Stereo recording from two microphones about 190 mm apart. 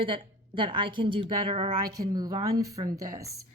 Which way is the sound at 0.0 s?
25° right (ahead or behind).